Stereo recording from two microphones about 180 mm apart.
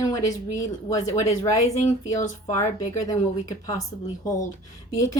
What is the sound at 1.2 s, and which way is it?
Speech, 15° left (ahead or behind).